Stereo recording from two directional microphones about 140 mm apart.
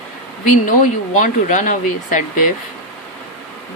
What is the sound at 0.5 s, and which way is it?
Speech, 60° left (ahead or behind).